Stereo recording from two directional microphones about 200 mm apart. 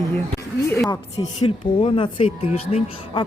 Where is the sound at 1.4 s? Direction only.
25° left (ahead or behind).